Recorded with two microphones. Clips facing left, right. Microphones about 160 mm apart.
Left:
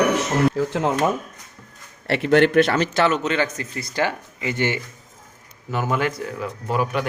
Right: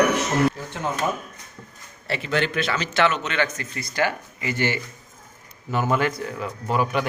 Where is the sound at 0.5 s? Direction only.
90° left.